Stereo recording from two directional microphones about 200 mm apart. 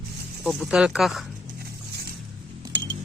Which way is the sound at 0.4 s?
5° right (ahead or behind).